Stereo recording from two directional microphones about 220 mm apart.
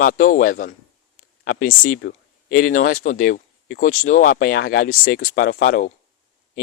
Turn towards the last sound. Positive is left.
turn(degrees=40)  # may be behind; listen again after turning